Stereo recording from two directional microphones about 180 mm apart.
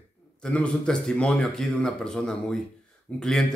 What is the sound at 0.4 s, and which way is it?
A man's voice, 5° left (ahead or behind).